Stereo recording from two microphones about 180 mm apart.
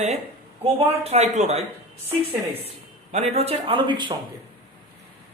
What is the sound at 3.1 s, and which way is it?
Speech, 35° right (ahead or behind).